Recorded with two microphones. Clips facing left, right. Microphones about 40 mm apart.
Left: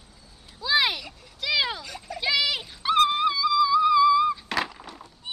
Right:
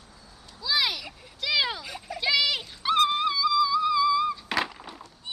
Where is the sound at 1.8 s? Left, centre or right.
Centre.